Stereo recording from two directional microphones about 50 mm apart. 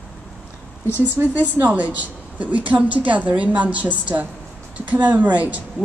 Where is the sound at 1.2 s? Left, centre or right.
Right.